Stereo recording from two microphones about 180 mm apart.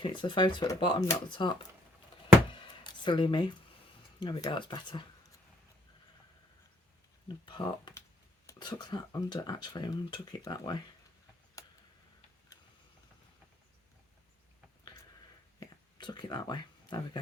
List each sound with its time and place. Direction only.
0.0 s speech: 25° left (ahead or behind)
2.5 s music: 25° left (ahead or behind)
4.2 s speech: 25° left (ahead or behind)
7.3 s speech: 25° left (ahead or behind)
15.6 s whispering: 25° left (ahead or behind)